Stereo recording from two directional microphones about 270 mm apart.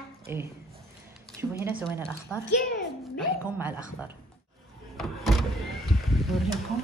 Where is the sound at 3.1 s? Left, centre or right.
Centre.